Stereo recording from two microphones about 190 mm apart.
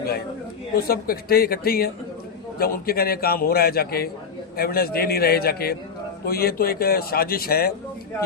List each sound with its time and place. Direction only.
0.8 s a man's voice: 50° left (ahead or behind)